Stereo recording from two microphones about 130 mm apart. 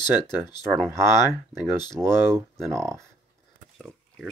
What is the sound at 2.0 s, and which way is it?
Speech, 30° right (ahead or behind).